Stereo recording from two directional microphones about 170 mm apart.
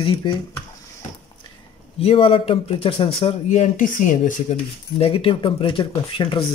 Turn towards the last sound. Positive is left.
turn(degrees=30)  # may be behind; listen again after turning